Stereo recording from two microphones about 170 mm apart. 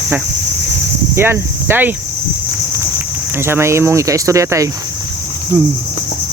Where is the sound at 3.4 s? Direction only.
15° right (ahead or behind).